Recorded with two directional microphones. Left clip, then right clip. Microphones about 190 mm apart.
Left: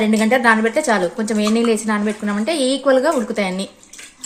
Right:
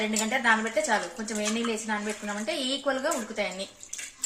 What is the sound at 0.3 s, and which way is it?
Speech, 60° left (ahead or behind).